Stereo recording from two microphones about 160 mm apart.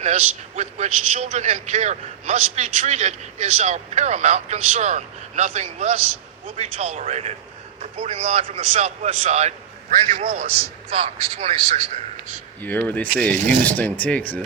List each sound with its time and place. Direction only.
0.0 s a man's voice: 45° right (ahead or behind)
12.6 s speech: 10° left (ahead or behind)